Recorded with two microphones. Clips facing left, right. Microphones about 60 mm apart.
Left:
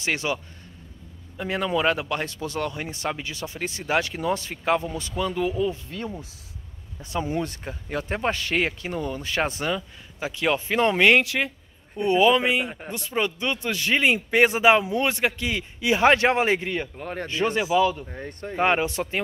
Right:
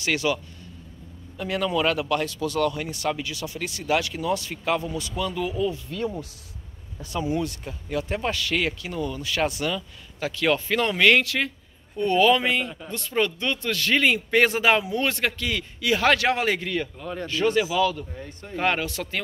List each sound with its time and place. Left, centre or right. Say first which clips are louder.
0.0 s speech: right 2 dB; left
1.4 s speech: even; left
10.2 s speech: right 1 dB; centre
17.0 s speech: even; left
17.3 s speech: even; left
18.1 s speech: left 3 dB; left
18.6 s speech: left 3 dB; left